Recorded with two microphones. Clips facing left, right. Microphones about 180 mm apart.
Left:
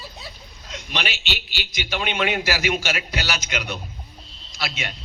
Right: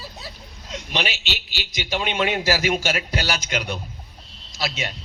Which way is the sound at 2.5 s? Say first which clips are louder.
Right 2 dB; 40° right (ahead or behind).